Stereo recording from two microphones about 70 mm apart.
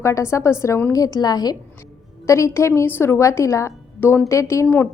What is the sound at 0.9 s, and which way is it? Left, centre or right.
Speech, left.